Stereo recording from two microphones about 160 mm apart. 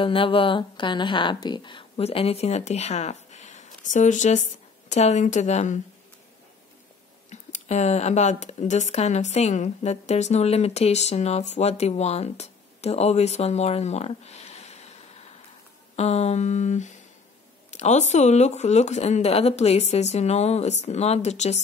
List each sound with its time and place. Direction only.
0.0 s speech: 35° left (ahead or behind)
7.2 s speech: 45° left (ahead or behind)